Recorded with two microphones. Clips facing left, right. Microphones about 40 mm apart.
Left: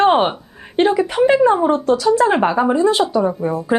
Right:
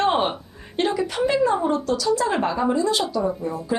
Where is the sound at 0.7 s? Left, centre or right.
Left.